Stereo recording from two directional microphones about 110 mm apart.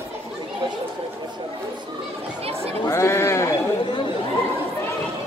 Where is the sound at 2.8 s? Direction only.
25° left (ahead or behind).